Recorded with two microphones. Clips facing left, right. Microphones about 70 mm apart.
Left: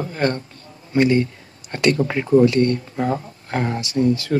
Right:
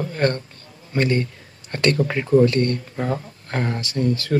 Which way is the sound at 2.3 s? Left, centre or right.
Centre.